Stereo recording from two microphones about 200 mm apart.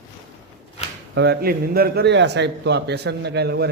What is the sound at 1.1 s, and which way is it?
A man's voice, 55° right (ahead or behind).